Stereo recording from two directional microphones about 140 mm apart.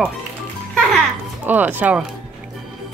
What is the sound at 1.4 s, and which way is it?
Speech, 10° right (ahead or behind).